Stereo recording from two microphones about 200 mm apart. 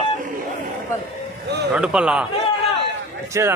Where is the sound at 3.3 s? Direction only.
15° right (ahead or behind).